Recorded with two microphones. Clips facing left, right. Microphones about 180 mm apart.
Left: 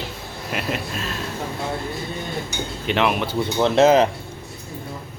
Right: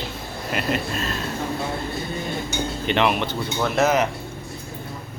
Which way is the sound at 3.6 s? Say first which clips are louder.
Left 5 dB; 25° left (ahead or behind).